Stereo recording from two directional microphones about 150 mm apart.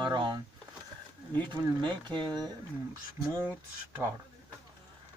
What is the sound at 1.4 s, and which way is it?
Speech, 30° right (ahead or behind).